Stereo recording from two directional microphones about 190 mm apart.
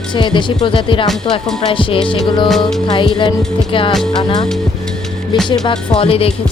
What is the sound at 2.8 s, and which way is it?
Music, 25° left (ahead or behind).